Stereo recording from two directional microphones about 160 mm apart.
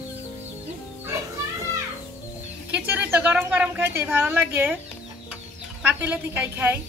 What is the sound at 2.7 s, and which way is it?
Speech, 10° right (ahead or behind).